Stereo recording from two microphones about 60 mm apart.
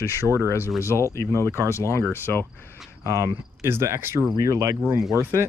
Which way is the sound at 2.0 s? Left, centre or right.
Left.